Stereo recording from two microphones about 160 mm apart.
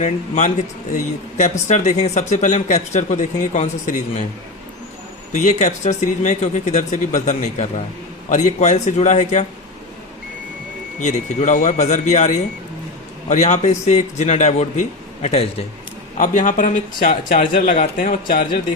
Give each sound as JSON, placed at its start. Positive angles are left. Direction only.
{"t": 0.0, "sound": "speech", "side_deg": 50}
{"t": 5.3, "sound": "speech", "side_deg": 50}
{"t": 11.0, "sound": "speech", "side_deg": 45}